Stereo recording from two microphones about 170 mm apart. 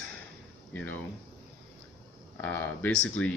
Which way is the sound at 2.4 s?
10° left (ahead or behind).